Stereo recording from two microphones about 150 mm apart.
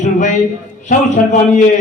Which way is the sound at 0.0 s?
55° left (ahead or behind).